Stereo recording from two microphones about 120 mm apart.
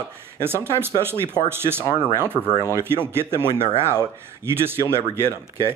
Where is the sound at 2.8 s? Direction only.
20° right (ahead or behind).